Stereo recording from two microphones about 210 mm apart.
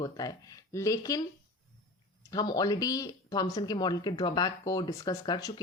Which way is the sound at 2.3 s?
20° left (ahead or behind).